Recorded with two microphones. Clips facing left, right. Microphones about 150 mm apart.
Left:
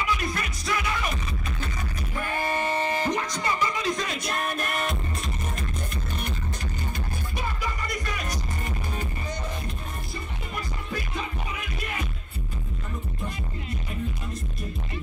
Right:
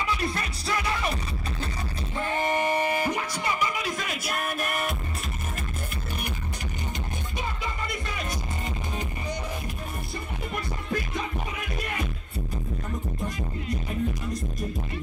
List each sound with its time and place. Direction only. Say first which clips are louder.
0.0 s music: even; 30° right (ahead or behind)
2.1 s music: right 2 dB; 20° right (ahead or behind); by 4.9 s 5° right (ahead or behind)
7.3 s music: left 1 dB; 25° right (ahead or behind)